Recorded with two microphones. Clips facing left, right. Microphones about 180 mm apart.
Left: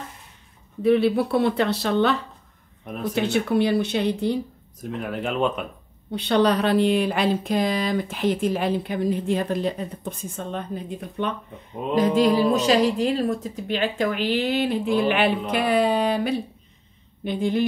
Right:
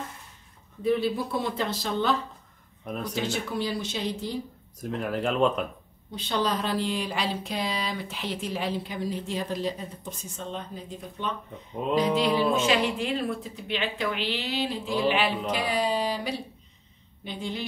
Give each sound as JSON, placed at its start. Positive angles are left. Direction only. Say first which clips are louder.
{"t": 0.8, "sound": "speech", "louder": "left 7 dB", "side_deg": 70}
{"t": 2.8, "sound": "speech", "louder": "left 4 dB", "side_deg": 0}
{"t": 3.2, "sound": "speech", "louder": "left 10 dB", "side_deg": 60}
{"t": 4.7, "sound": "speech", "louder": "even", "side_deg": 0}
{"t": 6.1, "sound": "speech", "louder": "left 8 dB", "side_deg": 65}
{"t": 12.2, "sound": "speech", "louder": "left 5 dB", "side_deg": 40}